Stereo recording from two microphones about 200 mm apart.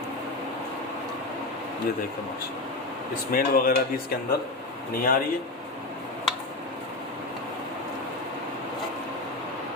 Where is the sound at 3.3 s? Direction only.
45° left (ahead or behind).